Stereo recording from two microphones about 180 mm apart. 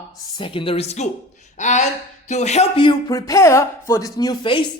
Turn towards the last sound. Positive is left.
turn(degrees=25)  # may be behind; listen again after turning